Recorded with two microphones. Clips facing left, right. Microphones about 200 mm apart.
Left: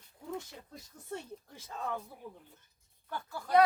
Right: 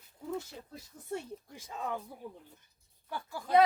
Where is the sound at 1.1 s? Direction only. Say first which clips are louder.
Right 3 dB; 10° right (ahead or behind).